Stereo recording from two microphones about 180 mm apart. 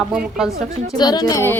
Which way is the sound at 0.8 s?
20° left (ahead or behind).